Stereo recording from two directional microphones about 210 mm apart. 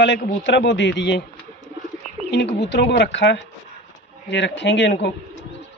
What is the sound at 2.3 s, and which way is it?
Speech, 55° left (ahead or behind).